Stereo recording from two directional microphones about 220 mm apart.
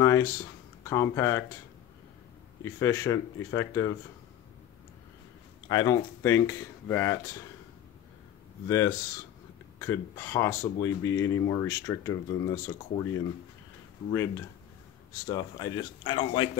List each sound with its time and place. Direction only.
0.0 s a sound: 15° left (ahead or behind)
0.8 s speech: 15° left (ahead or behind)
2.6 s speech: 15° left (ahead or behind)
5.7 s speech: 15° left (ahead or behind)
8.6 s speech: 15° left (ahead or behind)
14.1 s speech: 15° left (ahead or behind)